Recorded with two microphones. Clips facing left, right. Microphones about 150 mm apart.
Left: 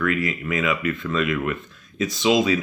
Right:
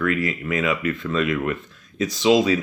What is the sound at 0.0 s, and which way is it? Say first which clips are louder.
Speech: right 1 dB; 35° right (ahead or behind).